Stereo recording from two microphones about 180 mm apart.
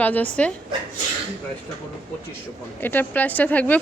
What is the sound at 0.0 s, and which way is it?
Speech, 10° left (ahead or behind).